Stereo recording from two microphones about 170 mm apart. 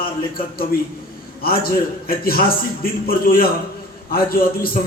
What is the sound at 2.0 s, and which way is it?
A man's voice, 60° left (ahead or behind).